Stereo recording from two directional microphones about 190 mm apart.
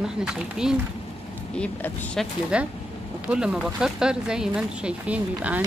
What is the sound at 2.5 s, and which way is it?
Speech, 5° right (ahead or behind).